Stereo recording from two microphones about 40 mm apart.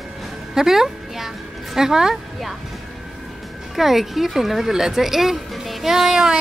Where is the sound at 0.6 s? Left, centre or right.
Centre.